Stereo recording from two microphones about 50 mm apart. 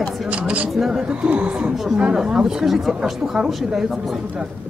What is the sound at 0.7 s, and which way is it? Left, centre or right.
Speech, centre.